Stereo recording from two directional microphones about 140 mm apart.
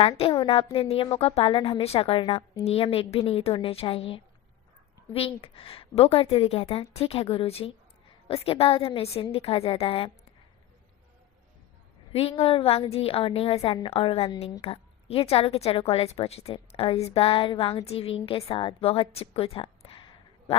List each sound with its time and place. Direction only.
0.0 s a woman's voice: 40° left (ahead or behind)
12.4 s a woman's voice: 40° left (ahead or behind)